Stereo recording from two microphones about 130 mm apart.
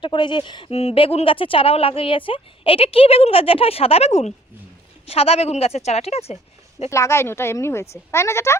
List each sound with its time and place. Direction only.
0.0 s speech: 40° left (ahead or behind); by 6.9 s 55° left (ahead or behind)
6.9 s speech: 20° left (ahead or behind)